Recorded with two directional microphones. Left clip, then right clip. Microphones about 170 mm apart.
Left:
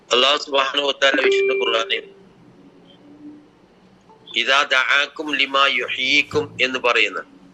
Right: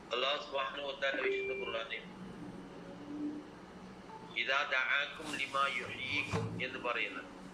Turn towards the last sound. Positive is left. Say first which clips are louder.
# left 19 dB
turn(degrees=70)  # may be behind; listen again after turning